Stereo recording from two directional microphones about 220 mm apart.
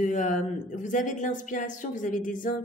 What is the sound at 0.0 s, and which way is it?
Speech, 35° left (ahead or behind).